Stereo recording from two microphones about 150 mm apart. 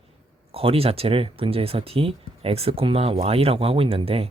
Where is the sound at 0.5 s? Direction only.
40° right (ahead or behind).